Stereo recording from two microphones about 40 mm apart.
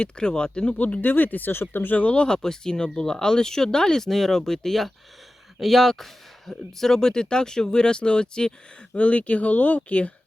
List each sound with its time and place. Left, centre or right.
0.0 s speech: left
0.8 s speech: left
2.0 s speech: left
2.2 s speech: centre
9.0 s speech: left